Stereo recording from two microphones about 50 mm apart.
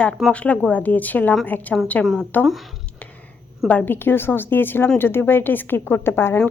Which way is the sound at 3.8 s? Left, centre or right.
Left.